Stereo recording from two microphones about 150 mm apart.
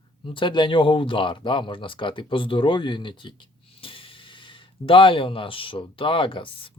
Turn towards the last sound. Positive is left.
turn(degrees=35)  # may be behind; listen again after turning